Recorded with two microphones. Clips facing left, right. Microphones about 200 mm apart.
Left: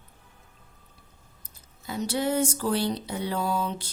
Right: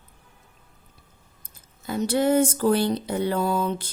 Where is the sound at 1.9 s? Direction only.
50° right (ahead or behind).